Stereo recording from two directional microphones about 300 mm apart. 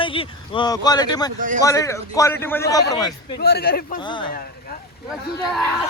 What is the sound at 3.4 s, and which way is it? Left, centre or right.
Speech, left.